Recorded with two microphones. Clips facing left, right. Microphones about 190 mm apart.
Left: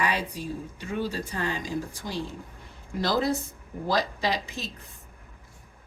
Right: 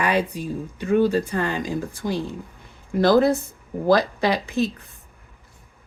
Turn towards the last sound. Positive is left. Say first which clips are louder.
# right 8 dB
turn(degrees=-55)  # may be behind; listen again after turning